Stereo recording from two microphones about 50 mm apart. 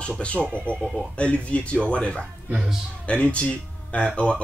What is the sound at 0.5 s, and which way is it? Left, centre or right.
Speech, left.